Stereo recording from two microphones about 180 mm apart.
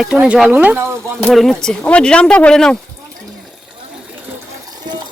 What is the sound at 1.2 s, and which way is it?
Speech, centre (ahead or behind).